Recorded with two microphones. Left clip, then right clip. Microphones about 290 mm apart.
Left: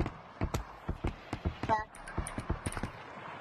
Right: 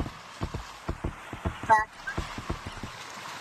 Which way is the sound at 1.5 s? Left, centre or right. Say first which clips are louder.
Right 10 dB; right.